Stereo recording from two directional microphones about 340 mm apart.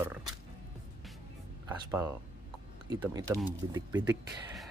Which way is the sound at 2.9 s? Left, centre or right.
Centre.